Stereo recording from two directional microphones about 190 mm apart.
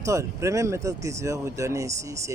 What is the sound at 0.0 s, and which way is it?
Speech, 15° right (ahead or behind).